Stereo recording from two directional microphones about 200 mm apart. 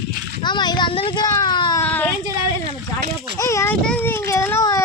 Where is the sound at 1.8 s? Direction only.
5° left (ahead or behind).